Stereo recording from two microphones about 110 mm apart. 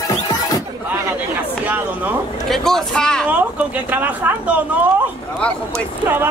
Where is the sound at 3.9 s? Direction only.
15° right (ahead or behind).